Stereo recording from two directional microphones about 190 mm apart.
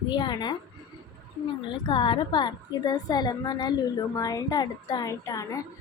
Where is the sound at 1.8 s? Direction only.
25° left (ahead or behind).